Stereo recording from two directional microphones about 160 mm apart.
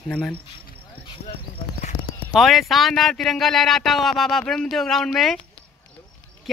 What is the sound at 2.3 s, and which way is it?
A man's voice, centre (ahead or behind).